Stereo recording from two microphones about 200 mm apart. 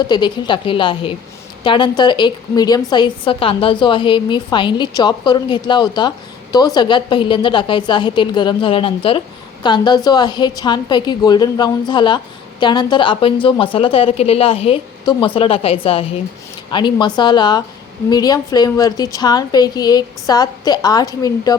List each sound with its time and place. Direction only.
0.0 s a woman's voice: 20° left (ahead or behind)